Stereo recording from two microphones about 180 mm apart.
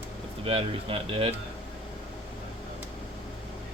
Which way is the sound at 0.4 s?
30° right (ahead or behind).